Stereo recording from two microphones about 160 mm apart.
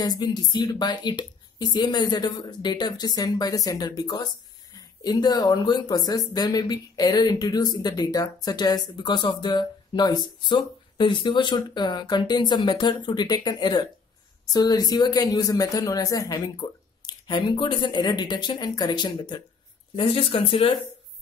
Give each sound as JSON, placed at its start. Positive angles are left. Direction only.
{"t": 0.0, "sound": "speech", "side_deg": 25}